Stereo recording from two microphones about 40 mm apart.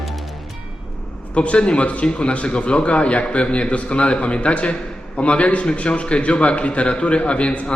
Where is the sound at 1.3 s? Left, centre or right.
Left.